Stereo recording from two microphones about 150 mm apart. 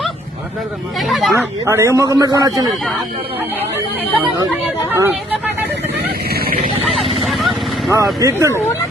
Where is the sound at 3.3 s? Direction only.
10° right (ahead or behind).